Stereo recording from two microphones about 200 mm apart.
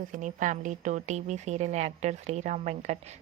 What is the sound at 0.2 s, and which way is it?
A woman's voice, 40° right (ahead or behind).